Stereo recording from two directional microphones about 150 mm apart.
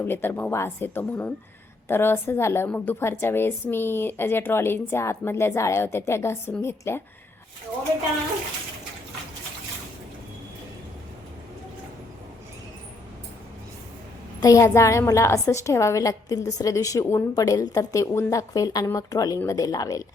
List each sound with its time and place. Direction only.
0.0 s a woman's voice: 15° left (ahead or behind)
14.4 s a woman's voice: 20° left (ahead or behind)